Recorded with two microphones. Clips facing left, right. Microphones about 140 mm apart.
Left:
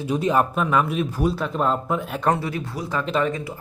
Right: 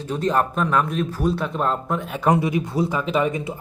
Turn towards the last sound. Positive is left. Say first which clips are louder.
# right 1 dB
turn(degrees=-20)  # may be behind; listen again after turning